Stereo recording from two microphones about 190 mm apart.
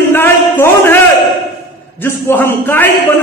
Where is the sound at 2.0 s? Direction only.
10° left (ahead or behind).